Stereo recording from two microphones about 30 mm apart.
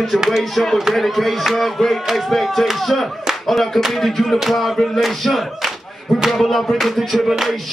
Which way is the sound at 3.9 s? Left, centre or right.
Centre.